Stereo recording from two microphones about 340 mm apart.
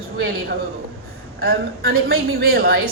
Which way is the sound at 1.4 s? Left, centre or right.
Right.